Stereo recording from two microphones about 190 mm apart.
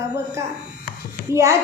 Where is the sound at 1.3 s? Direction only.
15° right (ahead or behind).